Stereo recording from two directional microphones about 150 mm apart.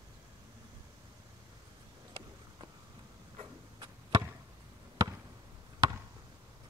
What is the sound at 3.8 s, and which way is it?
Chop, 25° right (ahead or behind).